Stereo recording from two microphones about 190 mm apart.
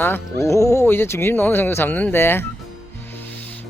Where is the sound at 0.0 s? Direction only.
15° left (ahead or behind).